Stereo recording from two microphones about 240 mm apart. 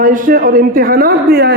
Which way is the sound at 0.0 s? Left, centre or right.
Right.